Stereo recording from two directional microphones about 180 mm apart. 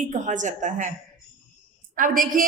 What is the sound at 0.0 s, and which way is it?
Speech, 45° right (ahead or behind).